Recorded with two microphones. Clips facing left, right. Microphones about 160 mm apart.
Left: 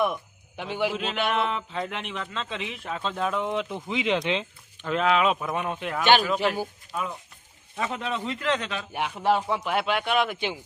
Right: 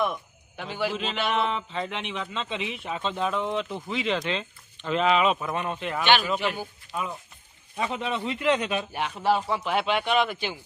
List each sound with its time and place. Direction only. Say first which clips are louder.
0.0 s speech: left 2 dB; 15° left (ahead or behind)
0.9 s a man's voice: left 1 dB; centre (ahead or behind)
4.9 s a man's voice: even; centre (ahead or behind)
9.0 s speech: left 1 dB; 10° left (ahead or behind)
9.2 s a man's voice: left 1 dB; 5° right (ahead or behind)
9.6 s a man's voice: even; 5° left (ahead or behind)
10.3 s speech: left 2 dB; 20° left (ahead or behind)